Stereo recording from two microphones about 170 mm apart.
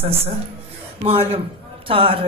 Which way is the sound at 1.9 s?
35° right (ahead or behind).